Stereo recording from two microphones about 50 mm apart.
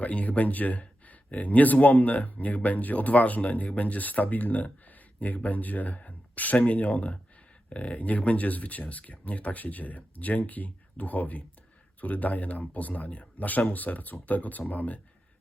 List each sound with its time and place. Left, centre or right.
0.0 s speech: left